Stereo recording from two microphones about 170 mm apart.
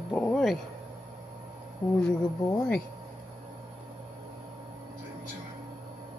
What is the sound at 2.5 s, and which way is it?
Speech, 5° left (ahead or behind).